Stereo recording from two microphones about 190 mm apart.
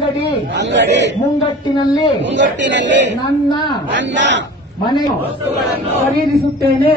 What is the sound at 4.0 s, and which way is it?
Speech, 70° right (ahead or behind).